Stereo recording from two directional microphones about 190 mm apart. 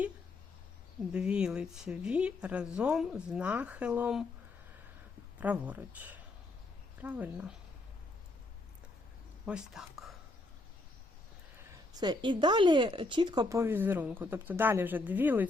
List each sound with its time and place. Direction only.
1.1 s speech: 5° right (ahead or behind)
5.4 s speech: 10° right (ahead or behind)
9.5 s speech: 5° right (ahead or behind)
11.9 s speech: 25° right (ahead or behind)